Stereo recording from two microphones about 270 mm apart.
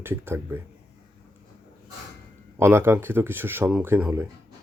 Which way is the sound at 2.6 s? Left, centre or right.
Centre.